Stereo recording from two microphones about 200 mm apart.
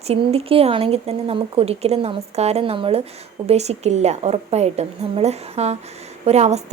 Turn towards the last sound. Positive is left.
turn(degrees=-35)  # may be behind; listen again after turning